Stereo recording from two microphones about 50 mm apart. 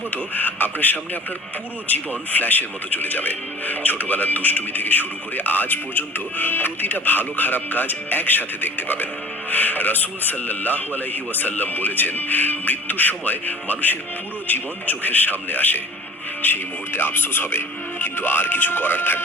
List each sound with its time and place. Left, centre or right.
0.3 s speech: left